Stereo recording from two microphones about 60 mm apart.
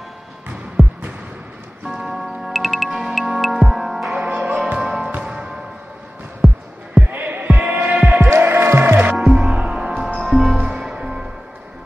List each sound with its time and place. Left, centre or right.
0.8 s music: centre
4.1 s music: centre
6.4 s music: centre
7.1 s music: right
9.1 s music: centre
10.6 s music: centre